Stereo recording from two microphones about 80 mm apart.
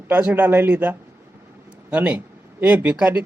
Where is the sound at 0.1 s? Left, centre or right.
Right.